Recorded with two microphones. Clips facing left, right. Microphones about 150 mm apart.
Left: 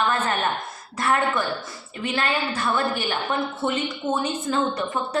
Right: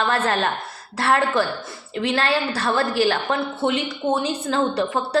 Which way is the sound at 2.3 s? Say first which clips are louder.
Right 3 dB; 85° right.